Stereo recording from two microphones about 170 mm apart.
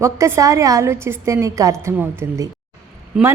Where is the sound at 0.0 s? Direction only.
15° right (ahead or behind).